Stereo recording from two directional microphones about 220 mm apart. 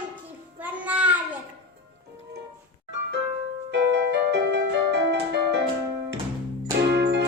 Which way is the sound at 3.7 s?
50° right (ahead or behind).